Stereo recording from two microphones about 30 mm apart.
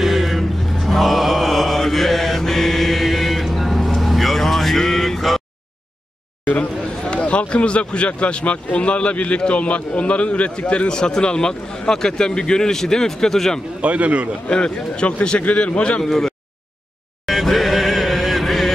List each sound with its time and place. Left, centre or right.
0.0 s mantra: centre
7.2 s a man's voice: left
10.9 s a man's voice: left
13.7 s speech: right
14.5 s speech: left
16.0 s speech: centre
17.3 s a sound: centre